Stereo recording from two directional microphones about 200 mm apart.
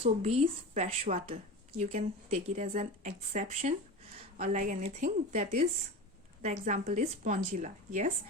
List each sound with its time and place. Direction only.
0.0 s a woman's voice: 30° right (ahead or behind)
5.4 s a woman's voice: 30° right (ahead or behind)